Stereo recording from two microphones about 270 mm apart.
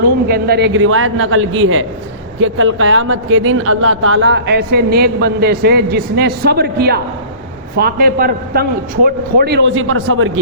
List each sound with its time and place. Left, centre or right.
0.0 s a man's voice: right